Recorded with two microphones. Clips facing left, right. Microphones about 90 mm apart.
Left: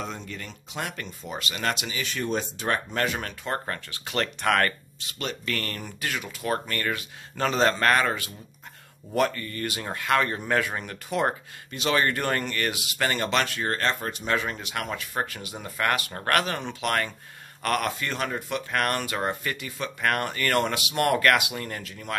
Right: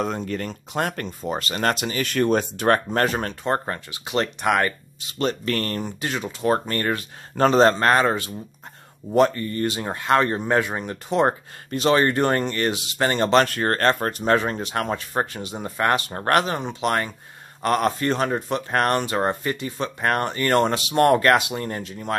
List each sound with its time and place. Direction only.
0.0 s speech: 45° right (ahead or behind)
2.9 s speech: 40° right (ahead or behind); by 4.7 s 15° right (ahead or behind)
5.2 s speech: 40° right (ahead or behind)
5.8 s speech: 25° right (ahead or behind)